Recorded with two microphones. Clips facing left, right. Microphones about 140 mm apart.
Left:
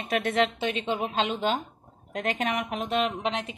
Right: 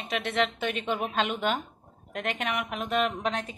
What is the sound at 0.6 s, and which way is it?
Speech, 50° right (ahead or behind).